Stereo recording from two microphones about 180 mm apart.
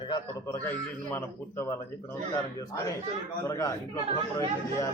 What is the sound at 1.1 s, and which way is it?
Speech, 15° left (ahead or behind).